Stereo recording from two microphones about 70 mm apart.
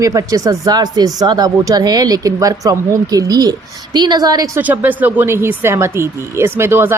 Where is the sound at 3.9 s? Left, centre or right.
Right.